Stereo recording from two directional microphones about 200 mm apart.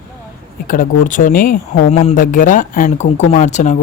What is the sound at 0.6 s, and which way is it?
Speech, 40° left (ahead or behind).